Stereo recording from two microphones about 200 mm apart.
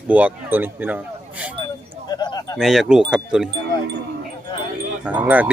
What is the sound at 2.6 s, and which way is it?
Speech, centre (ahead or behind).